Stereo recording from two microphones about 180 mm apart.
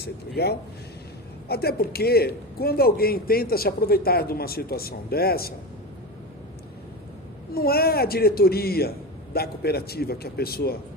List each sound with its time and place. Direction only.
0.0 s a man's voice: 65° left (ahead or behind)
7.5 s a man's voice: 60° left (ahead or behind)